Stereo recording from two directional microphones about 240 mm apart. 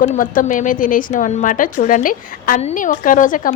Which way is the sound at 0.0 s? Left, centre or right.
Left.